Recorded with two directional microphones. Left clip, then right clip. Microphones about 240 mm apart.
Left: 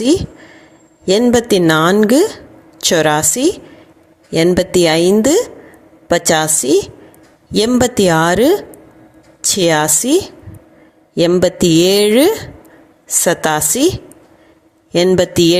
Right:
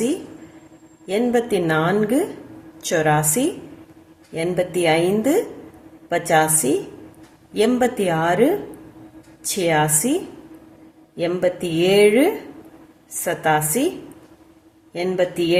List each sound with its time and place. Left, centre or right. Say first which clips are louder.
1.0 s a woman's voice: left 8 dB; left
9.6 s a woman's voice: left 5 dB; left
11.2 s a woman's voice: left 9 dB; left
14.9 s a woman's voice: left 9 dB; left